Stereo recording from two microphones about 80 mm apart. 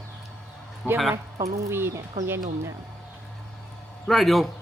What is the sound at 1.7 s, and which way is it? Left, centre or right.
Speech, right.